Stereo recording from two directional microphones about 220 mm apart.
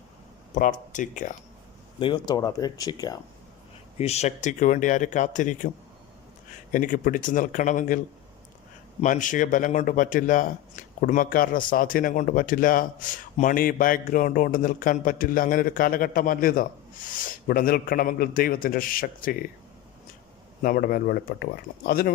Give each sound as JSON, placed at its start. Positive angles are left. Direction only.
{"t": 0.5, "sound": "speech", "side_deg": 35}
{"t": 2.0, "sound": "speech", "side_deg": 20}
{"t": 3.9, "sound": "speech", "side_deg": 30}
{"t": 6.7, "sound": "speech", "side_deg": 35}
{"t": 20.6, "sound": "speech", "side_deg": 40}